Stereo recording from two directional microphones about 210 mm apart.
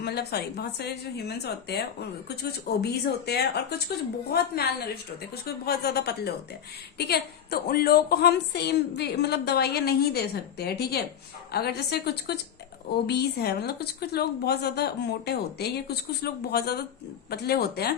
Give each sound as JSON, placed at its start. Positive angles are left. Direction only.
{"t": 0.0, "sound": "a woman's voice", "side_deg": 50}